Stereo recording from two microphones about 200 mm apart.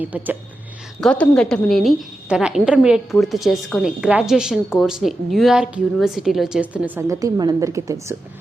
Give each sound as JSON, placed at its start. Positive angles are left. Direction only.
{"t": 0.0, "sound": "speech", "side_deg": -10}
{"t": 1.0, "sound": "a woman's voice", "side_deg": 5}